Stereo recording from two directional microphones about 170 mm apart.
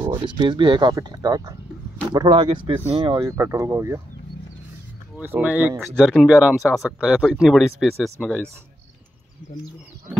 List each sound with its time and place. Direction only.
0.2 s speech: 30° right (ahead or behind)
5.1 s speech: 10° right (ahead or behind)